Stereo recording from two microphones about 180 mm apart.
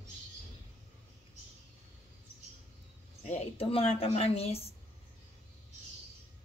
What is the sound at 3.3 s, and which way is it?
Speech, 30° left (ahead or behind).